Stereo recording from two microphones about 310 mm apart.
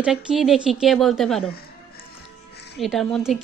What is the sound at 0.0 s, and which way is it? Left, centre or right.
Speech, centre.